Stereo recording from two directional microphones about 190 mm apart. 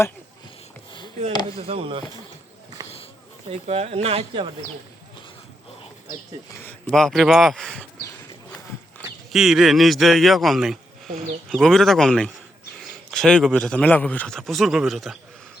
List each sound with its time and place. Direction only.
1.5 s speech: 30° right (ahead or behind)
2.8 s a sound: 20° right (ahead or behind)
3.5 s speech: 30° right (ahead or behind)
6.6 s a man's voice: 5° left (ahead or behind)
9.0 s a man's voice: centre (ahead or behind)